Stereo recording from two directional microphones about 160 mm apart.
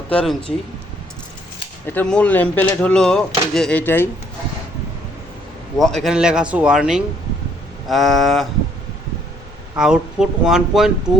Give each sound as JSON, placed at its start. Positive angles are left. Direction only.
{"t": 0.1, "sound": "speech", "side_deg": 5}
{"t": 1.9, "sound": "speech", "side_deg": 10}
{"t": 5.7, "sound": "a man's voice", "side_deg": 0}
{"t": 9.7, "sound": "a man's voice", "side_deg": -5}